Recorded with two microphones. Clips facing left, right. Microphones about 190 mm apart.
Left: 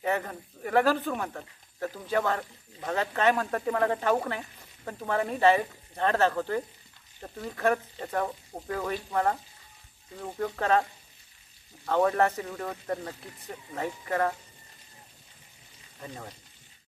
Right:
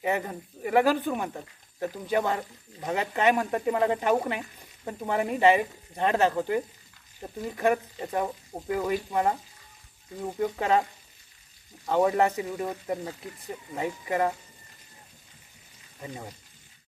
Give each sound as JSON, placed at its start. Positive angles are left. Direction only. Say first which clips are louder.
{"t": 0.0, "sound": "speech", "louder": "right 1 dB", "side_deg": -15}
{"t": 16.0, "sound": "speech", "louder": "right 2 dB", "side_deg": -10}